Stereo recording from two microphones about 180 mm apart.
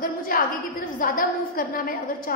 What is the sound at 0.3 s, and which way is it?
A woman's voice, 55° left (ahead or behind).